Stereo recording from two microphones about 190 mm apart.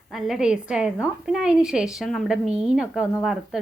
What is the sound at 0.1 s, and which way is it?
A woman's voice, centre (ahead or behind).